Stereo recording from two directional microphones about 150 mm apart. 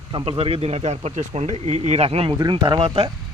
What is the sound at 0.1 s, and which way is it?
Speech, 35° right (ahead or behind).